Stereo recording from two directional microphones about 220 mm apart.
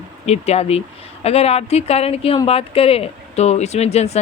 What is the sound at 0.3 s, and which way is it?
A woman's voice, 30° left (ahead or behind).